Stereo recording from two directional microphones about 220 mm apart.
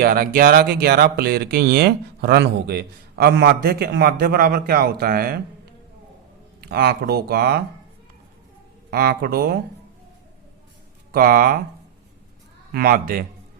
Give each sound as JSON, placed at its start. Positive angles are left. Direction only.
{"t": 0.0, "sound": "speech", "side_deg": -40}
{"t": 6.6, "sound": "speech", "side_deg": -45}
{"t": 8.9, "sound": "speech", "side_deg": -45}
{"t": 11.1, "sound": "speech", "side_deg": -40}
{"t": 12.7, "sound": "a man's voice", "side_deg": -45}